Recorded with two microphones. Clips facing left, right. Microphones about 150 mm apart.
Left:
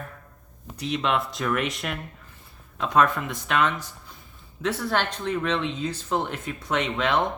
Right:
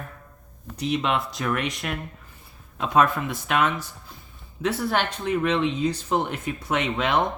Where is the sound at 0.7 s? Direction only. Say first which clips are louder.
Right 3 dB; 20° right (ahead or behind).